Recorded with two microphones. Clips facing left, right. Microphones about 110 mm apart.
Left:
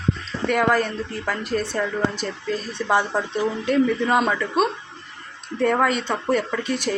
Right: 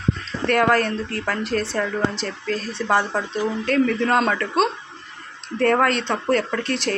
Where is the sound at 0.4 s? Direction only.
5° left (ahead or behind).